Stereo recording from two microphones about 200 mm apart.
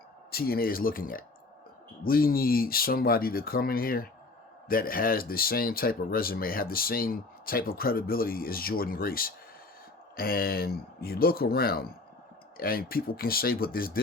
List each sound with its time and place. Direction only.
0.3 s speech: 50° left (ahead or behind)